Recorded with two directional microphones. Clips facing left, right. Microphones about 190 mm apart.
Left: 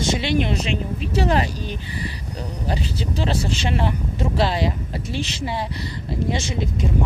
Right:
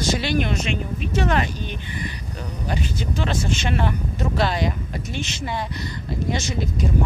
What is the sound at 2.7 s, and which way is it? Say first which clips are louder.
Speech: even; 35° left (ahead or behind).